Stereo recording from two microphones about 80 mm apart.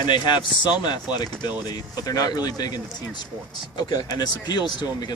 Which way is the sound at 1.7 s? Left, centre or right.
Left.